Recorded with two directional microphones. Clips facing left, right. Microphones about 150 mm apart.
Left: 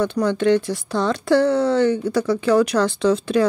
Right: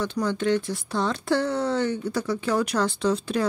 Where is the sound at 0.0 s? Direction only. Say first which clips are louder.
Left 6 dB; 65° left (ahead or behind).